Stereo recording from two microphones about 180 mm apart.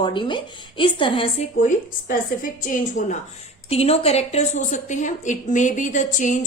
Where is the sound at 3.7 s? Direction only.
35° left (ahead or behind).